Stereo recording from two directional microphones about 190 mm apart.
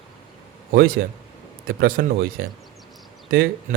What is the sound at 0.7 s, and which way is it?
Speech, 50° right (ahead or behind).